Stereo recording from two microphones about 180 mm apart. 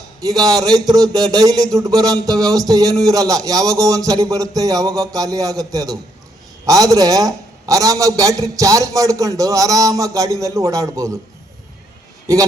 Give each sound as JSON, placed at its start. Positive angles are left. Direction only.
{"t": 0.2, "sound": "a man's voice", "side_deg": -20}